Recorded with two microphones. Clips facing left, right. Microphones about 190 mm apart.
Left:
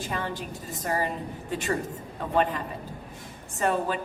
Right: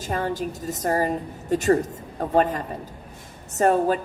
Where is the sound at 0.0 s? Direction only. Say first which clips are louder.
Right 6 dB; 40° right (ahead or behind).